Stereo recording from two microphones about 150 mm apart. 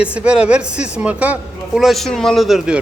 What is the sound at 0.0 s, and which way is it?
A man's voice, 10° right (ahead or behind).